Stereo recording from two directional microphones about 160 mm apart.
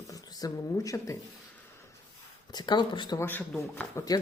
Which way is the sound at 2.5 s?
25° left (ahead or behind).